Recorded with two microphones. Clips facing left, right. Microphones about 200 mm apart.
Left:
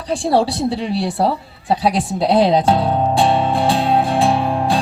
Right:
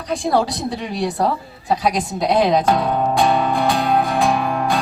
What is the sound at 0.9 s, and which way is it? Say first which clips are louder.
Speech: left 2 dB; 30° left (ahead or behind).